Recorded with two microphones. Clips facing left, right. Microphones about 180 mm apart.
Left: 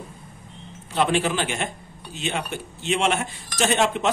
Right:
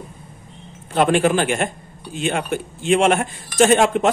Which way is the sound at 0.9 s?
50° right (ahead or behind).